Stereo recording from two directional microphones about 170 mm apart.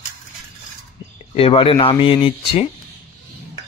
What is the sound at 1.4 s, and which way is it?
Speech, 35° left (ahead or behind).